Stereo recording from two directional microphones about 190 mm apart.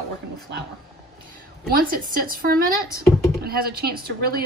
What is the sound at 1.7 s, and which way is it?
A woman's voice, 45° right (ahead or behind).